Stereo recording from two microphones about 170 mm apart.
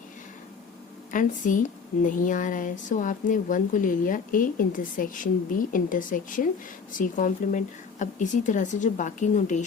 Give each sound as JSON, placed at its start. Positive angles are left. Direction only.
{"t": 1.1, "sound": "a woman's voice", "side_deg": 50}